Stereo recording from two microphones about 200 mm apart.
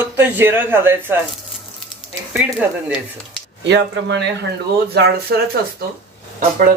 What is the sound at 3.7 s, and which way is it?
Speech, 60° right (ahead or behind).